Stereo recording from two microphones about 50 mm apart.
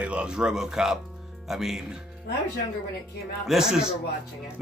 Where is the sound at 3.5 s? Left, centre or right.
Centre.